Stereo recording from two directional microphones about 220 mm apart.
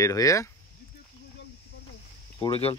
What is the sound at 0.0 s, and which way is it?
Speech, 15° left (ahead or behind).